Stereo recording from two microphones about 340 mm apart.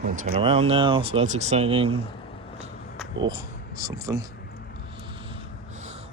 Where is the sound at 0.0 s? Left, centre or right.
Right.